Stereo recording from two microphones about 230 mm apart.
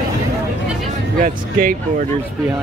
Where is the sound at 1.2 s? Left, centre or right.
Right.